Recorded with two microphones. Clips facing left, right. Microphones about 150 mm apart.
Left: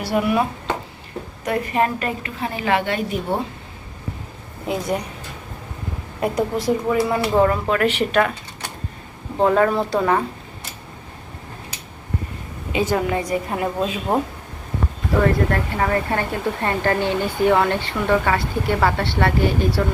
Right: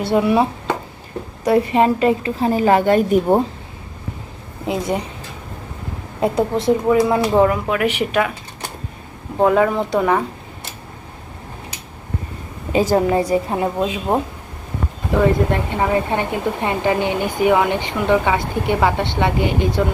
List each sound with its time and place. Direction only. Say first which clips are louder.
0.0 s a woman's voice: right 4 dB; 25° right (ahead or behind)
1.5 s a woman's voice: right 6 dB; 20° right (ahead or behind)
2.4 s speech: right 6 dB; 40° right (ahead or behind)
4.6 s a woman's voice: right 2 dB; 25° right (ahead or behind)
6.1 s speech: right 3 dB; 25° right (ahead or behind)
9.4 s speech: right 2 dB; 10° right (ahead or behind)
12.7 s speech: right 5 dB; 40° right (ahead or behind)
15.2 s speech: right 3 dB; 20° right (ahead or behind)